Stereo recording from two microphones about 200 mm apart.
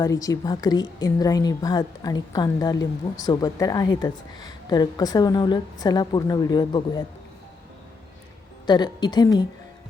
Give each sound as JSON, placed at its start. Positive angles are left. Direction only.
{"t": 0.0, "sound": "a woman's voice", "side_deg": 15}
{"t": 8.6, "sound": "a woman's voice", "side_deg": 20}